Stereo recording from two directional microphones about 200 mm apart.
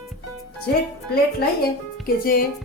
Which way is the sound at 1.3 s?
50° left (ahead or behind).